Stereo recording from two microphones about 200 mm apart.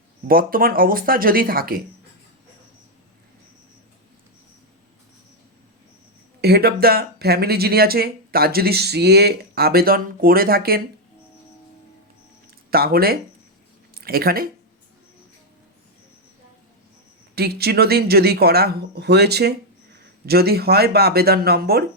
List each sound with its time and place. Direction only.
0.3 s speech: 45° right (ahead or behind)
6.4 s speech: 50° right (ahead or behind)
12.7 s speech: 50° right (ahead or behind)
17.3 s speech: 50° right (ahead or behind)